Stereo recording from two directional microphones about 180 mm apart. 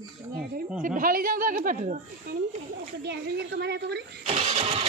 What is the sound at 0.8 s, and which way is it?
A woman's voice, 50° right (ahead or behind).